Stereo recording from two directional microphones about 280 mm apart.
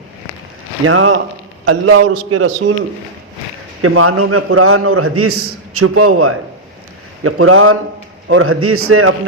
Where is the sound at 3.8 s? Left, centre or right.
Right.